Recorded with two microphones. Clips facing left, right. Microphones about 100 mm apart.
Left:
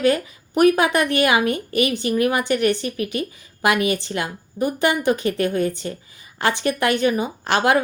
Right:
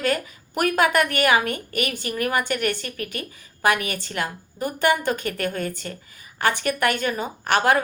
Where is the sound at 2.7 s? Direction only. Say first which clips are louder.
Left 6 dB; 15° left (ahead or behind).